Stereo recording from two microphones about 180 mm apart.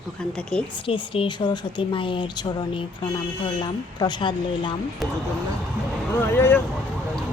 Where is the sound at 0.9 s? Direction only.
30° left (ahead or behind).